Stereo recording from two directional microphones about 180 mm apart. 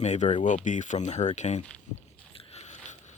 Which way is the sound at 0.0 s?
40° left (ahead or behind).